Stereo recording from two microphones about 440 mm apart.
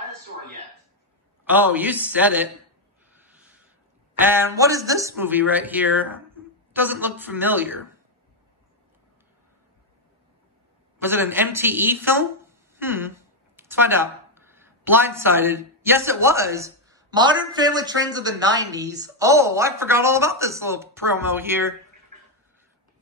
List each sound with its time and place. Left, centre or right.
1.4 s speech: centre
3.2 s a sound: centre
4.2 s speech: centre
11.0 s speech: centre